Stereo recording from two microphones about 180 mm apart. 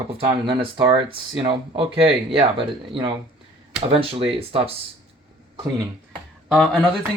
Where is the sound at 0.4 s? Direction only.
30° right (ahead or behind).